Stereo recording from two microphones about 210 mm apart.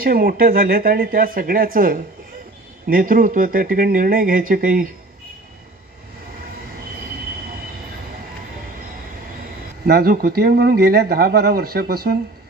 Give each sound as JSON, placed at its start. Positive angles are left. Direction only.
{"t": 0.0, "sound": "speech", "side_deg": -45}
{"t": 9.8, "sound": "speech", "side_deg": -45}